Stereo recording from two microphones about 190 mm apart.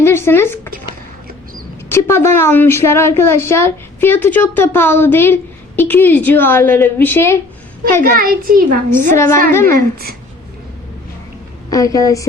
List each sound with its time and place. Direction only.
0.0 s a sound: 10° left (ahead or behind)
1.9 s a woman's voice: 15° left (ahead or behind)
8.1 s a child's voice: 50° right (ahead or behind)
9.1 s a woman's voice: 15° left (ahead or behind)
9.7 s a child's voice: 55° right (ahead or behind)
11.7 s a woman's voice: 15° left (ahead or behind)